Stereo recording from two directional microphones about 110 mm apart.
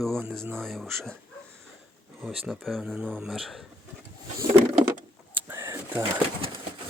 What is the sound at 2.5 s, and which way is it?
Speech, centre (ahead or behind).